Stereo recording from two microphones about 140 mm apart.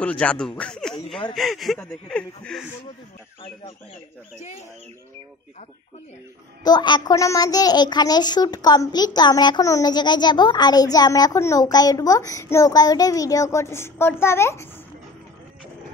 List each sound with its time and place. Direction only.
0.0 s speech: 10° left (ahead or behind)
6.6 s a child's voice: 30° left (ahead or behind)